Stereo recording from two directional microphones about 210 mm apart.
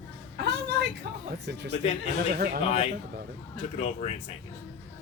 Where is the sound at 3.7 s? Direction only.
30° left (ahead or behind).